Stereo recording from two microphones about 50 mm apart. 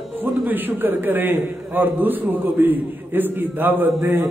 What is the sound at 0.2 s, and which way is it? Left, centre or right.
A man's voice, right.